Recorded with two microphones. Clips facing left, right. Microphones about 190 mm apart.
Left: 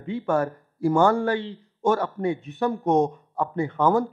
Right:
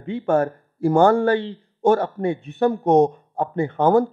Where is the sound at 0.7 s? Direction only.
55° right (ahead or behind).